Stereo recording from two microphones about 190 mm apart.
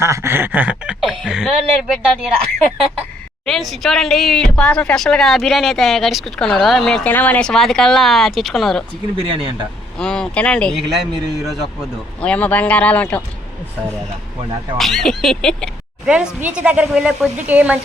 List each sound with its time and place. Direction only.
0.0 s speech: 15° right (ahead or behind)
3.4 s speech: centre (ahead or behind)
9.1 s speech: 30° right (ahead or behind)
10.0 s speech: 5° left (ahead or behind)
14.8 s speech: centre (ahead or behind)